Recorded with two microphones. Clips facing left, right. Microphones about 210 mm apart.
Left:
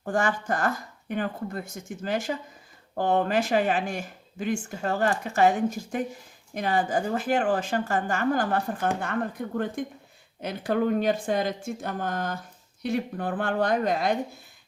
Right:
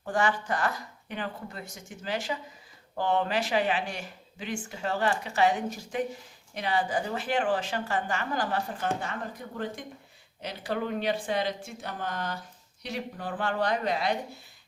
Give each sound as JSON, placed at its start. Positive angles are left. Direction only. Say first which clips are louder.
{"t": 0.0, "sound": "speech", "louder": "left 2 dB", "side_deg": 45}